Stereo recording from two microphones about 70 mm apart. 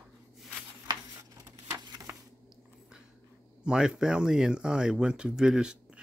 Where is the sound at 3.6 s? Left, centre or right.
Centre.